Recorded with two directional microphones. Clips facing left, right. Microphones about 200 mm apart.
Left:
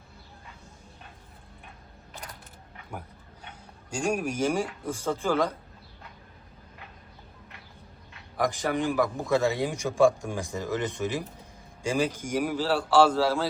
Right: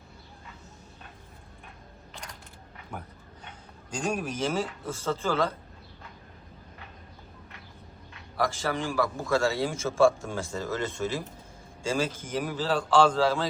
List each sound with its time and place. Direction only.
3.9 s speech: 10° left (ahead or behind)
8.4 s speech: 15° left (ahead or behind)